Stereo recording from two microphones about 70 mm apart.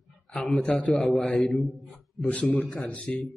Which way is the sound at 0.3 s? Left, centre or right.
Centre.